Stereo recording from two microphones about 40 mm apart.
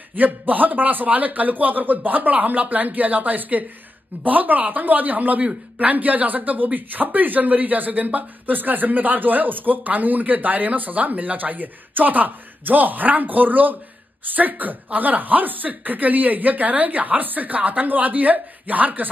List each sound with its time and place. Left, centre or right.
0.1 s speech: right